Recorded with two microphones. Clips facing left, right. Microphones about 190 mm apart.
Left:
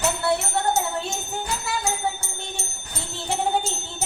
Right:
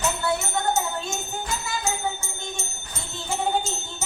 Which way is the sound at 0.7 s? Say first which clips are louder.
Even; 35° left (ahead or behind).